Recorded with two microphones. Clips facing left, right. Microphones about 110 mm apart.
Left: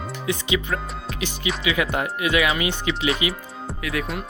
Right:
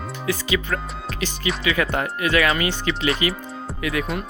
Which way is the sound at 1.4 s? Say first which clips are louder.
Right 1 dB; 5° left (ahead or behind).